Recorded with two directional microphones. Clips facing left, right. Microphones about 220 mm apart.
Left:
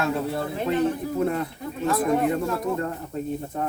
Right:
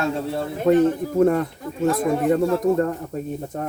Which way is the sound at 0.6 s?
45° right (ahead or behind).